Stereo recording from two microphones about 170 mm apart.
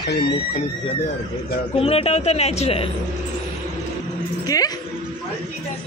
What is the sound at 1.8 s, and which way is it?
Speech, 35° left (ahead or behind).